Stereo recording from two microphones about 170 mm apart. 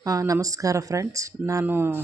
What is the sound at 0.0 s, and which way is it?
Speech, 20° right (ahead or behind).